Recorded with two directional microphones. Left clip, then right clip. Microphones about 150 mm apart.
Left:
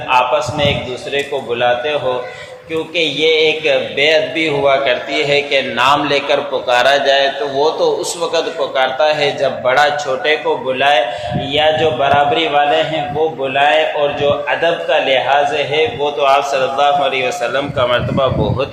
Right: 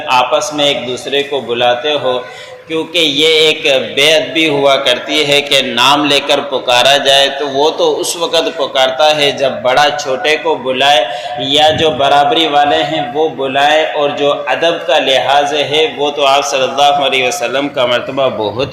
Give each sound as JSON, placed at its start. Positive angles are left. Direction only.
{"t": 0.1, "sound": "a man's voice", "side_deg": -35}